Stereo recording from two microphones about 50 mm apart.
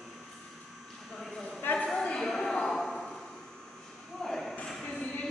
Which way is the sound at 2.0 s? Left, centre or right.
Centre.